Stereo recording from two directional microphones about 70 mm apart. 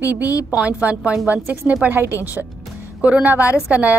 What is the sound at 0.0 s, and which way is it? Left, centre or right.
A woman's voice, right.